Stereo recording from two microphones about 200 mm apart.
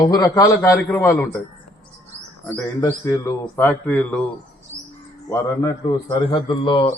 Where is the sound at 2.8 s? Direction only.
15° left (ahead or behind).